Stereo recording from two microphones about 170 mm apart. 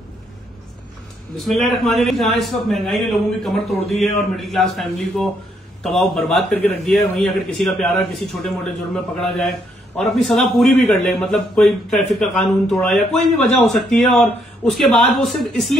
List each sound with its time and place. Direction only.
1.3 s speech: centre (ahead or behind)